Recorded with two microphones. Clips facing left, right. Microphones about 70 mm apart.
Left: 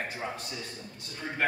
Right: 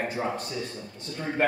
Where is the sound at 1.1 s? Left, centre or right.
Right.